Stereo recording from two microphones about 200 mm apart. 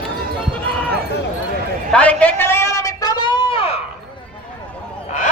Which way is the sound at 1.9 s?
5° left (ahead or behind).